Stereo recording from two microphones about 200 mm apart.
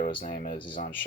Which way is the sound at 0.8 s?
45° left (ahead or behind).